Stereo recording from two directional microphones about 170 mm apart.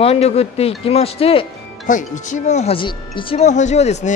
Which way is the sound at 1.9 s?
45° left (ahead or behind).